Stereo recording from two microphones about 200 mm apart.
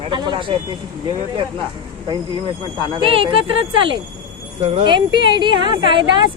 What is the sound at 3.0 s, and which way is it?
Speech, 25° right (ahead or behind).